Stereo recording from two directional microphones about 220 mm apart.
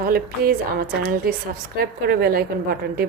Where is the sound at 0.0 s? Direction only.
40° right (ahead or behind).